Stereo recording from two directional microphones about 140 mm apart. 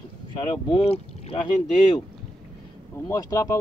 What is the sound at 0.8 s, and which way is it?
Speech, 45° left (ahead or behind).